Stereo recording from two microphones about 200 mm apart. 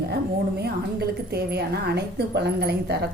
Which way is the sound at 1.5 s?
55° right (ahead or behind).